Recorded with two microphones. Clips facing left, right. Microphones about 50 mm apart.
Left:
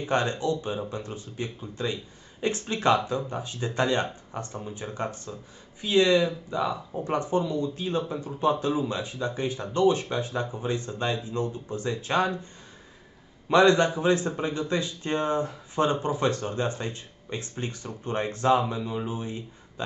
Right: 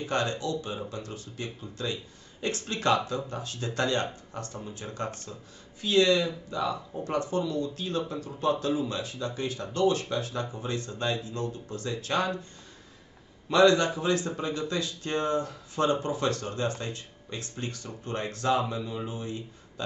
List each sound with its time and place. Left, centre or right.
0.0 s speech: left
13.5 s speech: left